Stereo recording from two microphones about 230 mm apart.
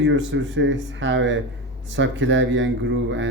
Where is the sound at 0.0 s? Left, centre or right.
Right.